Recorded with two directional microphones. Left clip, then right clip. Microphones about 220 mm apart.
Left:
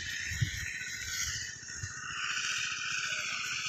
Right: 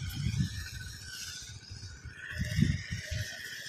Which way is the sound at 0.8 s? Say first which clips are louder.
Left 7 dB; 15° right (ahead or behind).